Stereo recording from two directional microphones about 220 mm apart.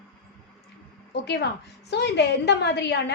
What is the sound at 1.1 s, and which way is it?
A woman's voice, 50° left (ahead or behind).